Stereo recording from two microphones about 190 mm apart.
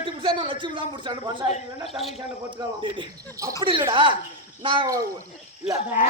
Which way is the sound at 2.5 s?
25° right (ahead or behind).